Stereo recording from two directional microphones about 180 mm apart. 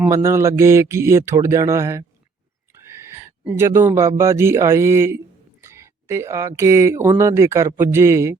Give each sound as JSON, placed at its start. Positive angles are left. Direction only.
{"t": 0.1, "sound": "a man's voice", "side_deg": -15}
{"t": 2.8, "sound": "neigh", "side_deg": -15}
{"t": 4.2, "sound": "a man's voice", "side_deg": -15}